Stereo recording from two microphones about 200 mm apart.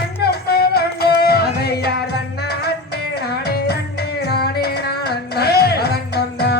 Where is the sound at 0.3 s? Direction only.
50° left (ahead or behind).